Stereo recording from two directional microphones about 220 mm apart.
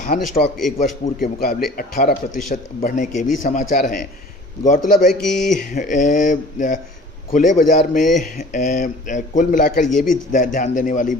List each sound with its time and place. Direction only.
0.0 s a man's voice: 40° left (ahead or behind)
5.2 s speech: centre (ahead or behind)
5.6 s a man's voice: 35° left (ahead or behind)